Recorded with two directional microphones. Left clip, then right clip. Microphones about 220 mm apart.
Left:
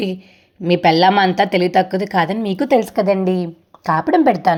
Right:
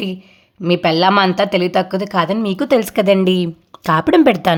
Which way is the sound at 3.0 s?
40° right (ahead or behind).